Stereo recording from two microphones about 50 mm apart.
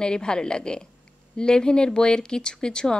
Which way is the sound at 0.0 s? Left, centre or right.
Centre.